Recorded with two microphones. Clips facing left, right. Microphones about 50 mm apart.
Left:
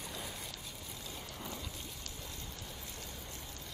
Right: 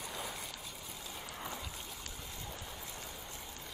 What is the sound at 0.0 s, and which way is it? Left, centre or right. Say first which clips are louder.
Vehicle: right 2 dB; centre.